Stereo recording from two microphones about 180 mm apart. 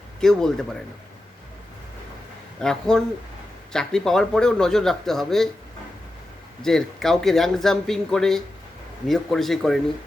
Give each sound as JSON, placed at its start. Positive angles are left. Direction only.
{"t": 0.2, "sound": "a man's voice", "side_deg": 5}
{"t": 2.6, "sound": "a man's voice", "side_deg": 5}
{"t": 6.6, "sound": "a man's voice", "side_deg": 0}